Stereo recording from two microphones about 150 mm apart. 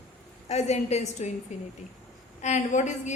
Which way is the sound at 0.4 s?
45° left (ahead or behind).